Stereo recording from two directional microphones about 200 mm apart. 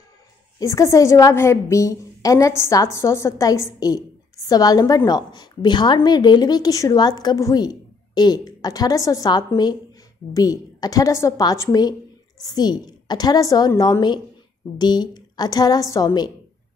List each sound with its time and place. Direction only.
0.6 s a woman's voice: 15° left (ahead or behind)